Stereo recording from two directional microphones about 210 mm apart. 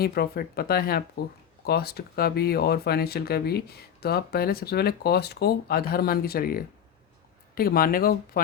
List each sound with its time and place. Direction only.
0.0 s speech: 45° left (ahead or behind)